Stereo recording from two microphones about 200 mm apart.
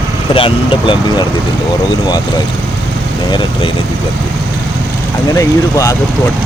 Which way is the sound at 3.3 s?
20° left (ahead or behind).